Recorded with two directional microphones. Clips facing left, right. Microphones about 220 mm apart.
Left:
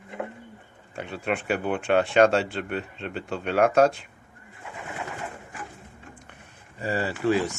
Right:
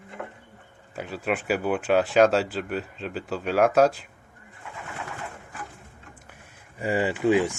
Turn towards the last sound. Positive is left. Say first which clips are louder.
# right 2 dB
turn(degrees=-15)  # may be behind; listen again after turning